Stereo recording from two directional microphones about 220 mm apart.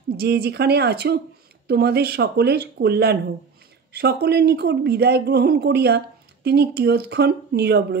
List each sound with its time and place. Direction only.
0.2 s speech: 45° right (ahead or behind)